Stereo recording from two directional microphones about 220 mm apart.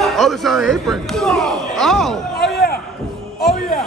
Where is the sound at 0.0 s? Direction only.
Centre (ahead or behind).